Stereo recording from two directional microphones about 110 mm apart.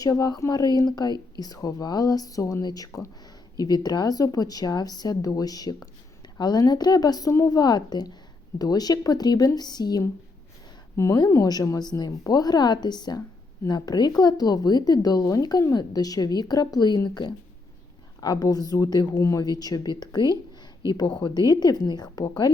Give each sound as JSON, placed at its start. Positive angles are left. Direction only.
{"t": 0.0, "sound": "speech", "side_deg": 35}
{"t": 10.9, "sound": "a woman's voice", "side_deg": 25}